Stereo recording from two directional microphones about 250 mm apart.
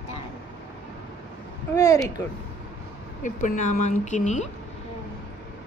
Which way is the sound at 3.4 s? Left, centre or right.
Left.